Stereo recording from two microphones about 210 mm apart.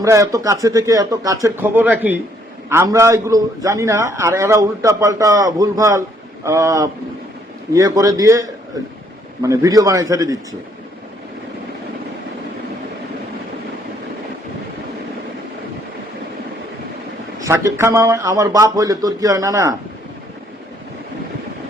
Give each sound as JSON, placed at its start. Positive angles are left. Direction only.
{"t": 0.0, "sound": "a man's voice", "side_deg": -15}
{"t": 17.4, "sound": "a man's voice", "side_deg": -15}